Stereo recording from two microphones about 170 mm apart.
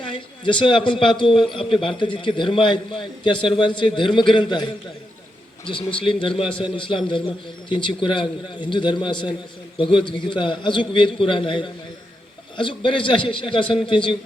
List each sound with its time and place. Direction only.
0.0 s a man's voice: 30° left (ahead or behind)